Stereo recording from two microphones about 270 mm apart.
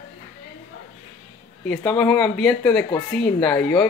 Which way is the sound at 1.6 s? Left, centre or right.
Centre.